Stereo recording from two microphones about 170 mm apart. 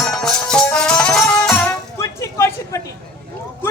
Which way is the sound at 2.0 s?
15° left (ahead or behind).